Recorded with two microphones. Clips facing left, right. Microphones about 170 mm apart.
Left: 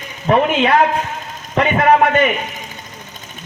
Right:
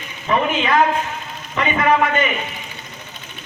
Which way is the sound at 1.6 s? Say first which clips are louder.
Left 4 dB; 55° left (ahead or behind).